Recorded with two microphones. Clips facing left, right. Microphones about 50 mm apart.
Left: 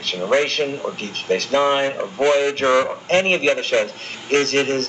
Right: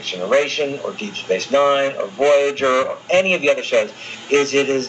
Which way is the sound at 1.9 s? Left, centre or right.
Centre.